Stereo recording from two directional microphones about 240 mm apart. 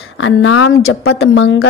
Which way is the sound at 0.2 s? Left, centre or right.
Left.